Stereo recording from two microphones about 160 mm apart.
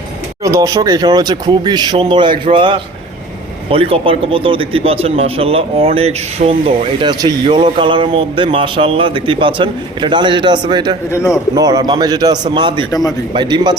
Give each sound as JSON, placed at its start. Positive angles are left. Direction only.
{"t": 0.4, "sound": "a man's voice", "side_deg": -20}
{"t": 11.1, "sound": "a man's voice", "side_deg": 15}
{"t": 11.5, "sound": "speech", "side_deg": -20}
{"t": 12.9, "sound": "a man's voice", "side_deg": 20}
{"t": 13.3, "sound": "speech", "side_deg": -30}